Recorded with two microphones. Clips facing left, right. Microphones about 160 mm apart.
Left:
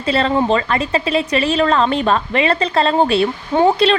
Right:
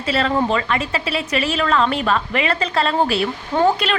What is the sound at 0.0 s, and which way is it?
Speech, 35° left (ahead or behind).